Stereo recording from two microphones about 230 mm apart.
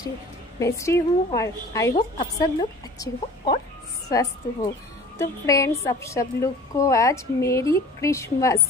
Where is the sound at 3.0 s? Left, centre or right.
Centre.